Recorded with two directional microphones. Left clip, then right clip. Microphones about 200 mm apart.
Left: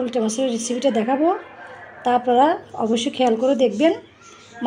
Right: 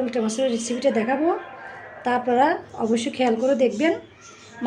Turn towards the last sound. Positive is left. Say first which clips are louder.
# left 3 dB
turn(degrees=25)  # may be behind; listen again after turning